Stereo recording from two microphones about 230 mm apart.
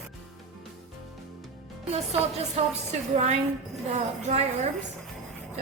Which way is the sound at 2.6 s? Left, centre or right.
Right.